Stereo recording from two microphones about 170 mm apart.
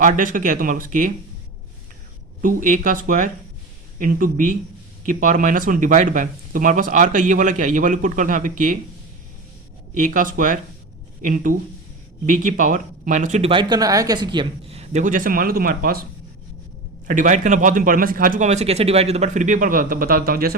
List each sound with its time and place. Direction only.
0.0 s speech: 50° right (ahead or behind)
2.4 s speech: 55° right (ahead or behind)
9.9 s speech: 50° right (ahead or behind)
13.5 s a man's voice: 25° right (ahead or behind); by 16.0 s 60° right (ahead or behind)
17.1 s speech: 50° right (ahead or behind)